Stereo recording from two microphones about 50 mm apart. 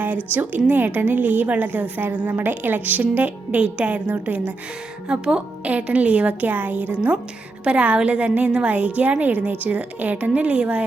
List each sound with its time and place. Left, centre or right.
0.3 s a woman's voice: right
5.0 s a woman's voice: centre